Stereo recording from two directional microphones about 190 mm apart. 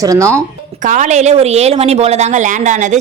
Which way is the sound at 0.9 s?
40° right (ahead or behind).